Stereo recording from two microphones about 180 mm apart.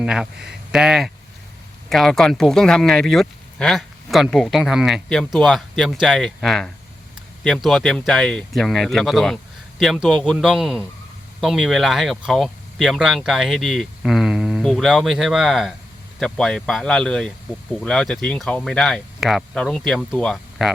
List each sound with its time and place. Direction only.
0.0 s speech: 5° right (ahead or behind)